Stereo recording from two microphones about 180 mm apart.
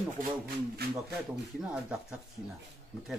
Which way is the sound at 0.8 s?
60° right (ahead or behind).